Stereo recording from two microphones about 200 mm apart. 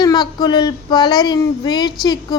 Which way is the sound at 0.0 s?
20° left (ahead or behind).